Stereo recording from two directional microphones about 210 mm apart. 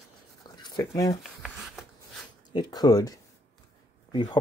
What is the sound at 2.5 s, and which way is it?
Speech, 20° left (ahead or behind).